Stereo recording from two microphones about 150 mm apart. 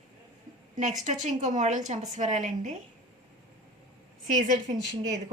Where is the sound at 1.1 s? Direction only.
50° right (ahead or behind).